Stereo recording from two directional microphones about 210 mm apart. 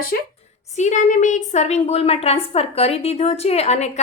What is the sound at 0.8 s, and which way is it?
A woman's voice, 35° left (ahead or behind).